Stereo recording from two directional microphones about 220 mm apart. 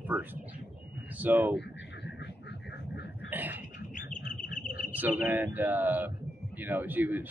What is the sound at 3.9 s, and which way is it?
Bird, 35° left (ahead or behind).